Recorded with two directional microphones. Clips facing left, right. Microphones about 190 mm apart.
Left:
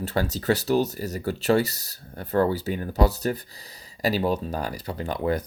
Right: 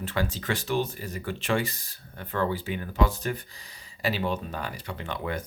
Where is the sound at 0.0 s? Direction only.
40° left (ahead or behind).